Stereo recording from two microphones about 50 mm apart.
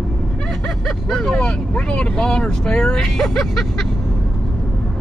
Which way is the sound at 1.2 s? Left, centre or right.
Centre.